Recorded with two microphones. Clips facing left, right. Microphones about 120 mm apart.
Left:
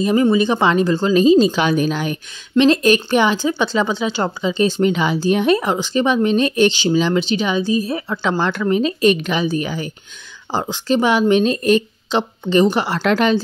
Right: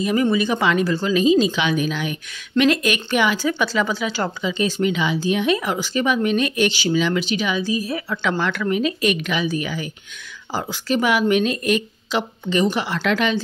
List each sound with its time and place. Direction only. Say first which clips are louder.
0.0 s speech: left 4 dB; 30° left (ahead or behind)